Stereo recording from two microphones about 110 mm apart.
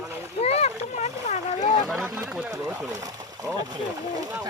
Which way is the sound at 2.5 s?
30° right (ahead or behind).